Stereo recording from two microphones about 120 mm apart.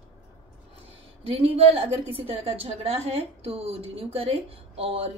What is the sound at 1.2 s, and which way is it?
A woman's voice, 55° right (ahead or behind).